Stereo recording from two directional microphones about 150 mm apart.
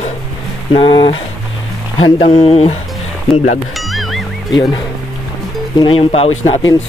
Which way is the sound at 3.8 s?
Centre (ahead or behind).